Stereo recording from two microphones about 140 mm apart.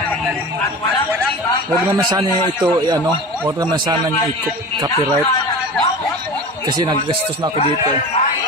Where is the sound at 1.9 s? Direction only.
30° right (ahead or behind).